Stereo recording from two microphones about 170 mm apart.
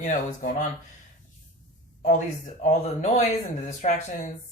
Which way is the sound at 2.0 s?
45° left (ahead or behind).